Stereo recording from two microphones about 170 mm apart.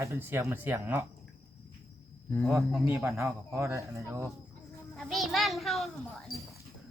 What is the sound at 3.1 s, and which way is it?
Speech, 15° right (ahead or behind).